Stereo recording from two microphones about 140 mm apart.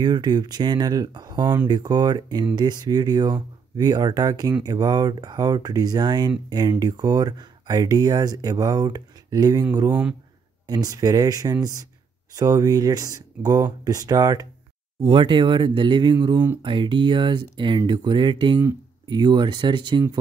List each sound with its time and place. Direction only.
0.0 s speech: 30° right (ahead or behind)
9.8 s speech: 10° right (ahead or behind)
10.7 s speech: 25° right (ahead or behind)
15.0 s speech: 40° right (ahead or behind)